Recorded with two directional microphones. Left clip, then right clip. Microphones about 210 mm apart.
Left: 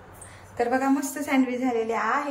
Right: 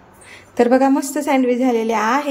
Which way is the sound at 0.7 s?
25° right (ahead or behind).